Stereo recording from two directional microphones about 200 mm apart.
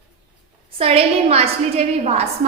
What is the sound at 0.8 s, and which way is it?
A woman's voice, 30° right (ahead or behind).